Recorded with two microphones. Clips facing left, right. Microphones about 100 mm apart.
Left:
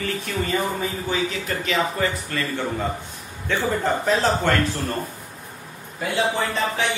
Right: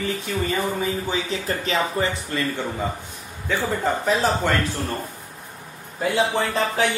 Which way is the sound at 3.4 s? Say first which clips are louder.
Left 1 dB; 5° right (ahead or behind).